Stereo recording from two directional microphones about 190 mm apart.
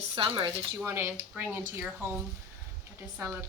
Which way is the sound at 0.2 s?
30° right (ahead or behind).